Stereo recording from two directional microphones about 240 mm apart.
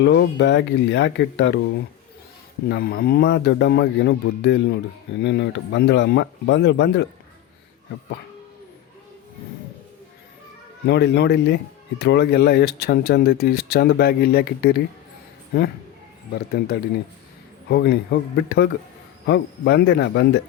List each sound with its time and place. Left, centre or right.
0.0 s speech: left
10.8 s speech: left
16.3 s speech: left